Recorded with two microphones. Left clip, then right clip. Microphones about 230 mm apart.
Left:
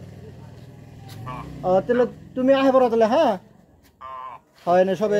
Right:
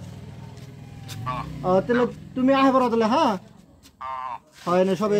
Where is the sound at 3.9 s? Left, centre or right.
Right.